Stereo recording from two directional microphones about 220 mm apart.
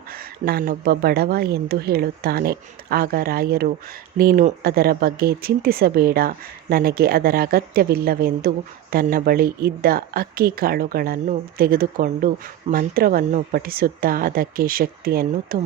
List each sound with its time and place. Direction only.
0.4 s speech: 40° right (ahead or behind)